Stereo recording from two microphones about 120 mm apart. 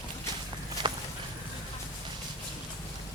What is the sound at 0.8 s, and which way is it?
Walk, 40° right (ahead or behind).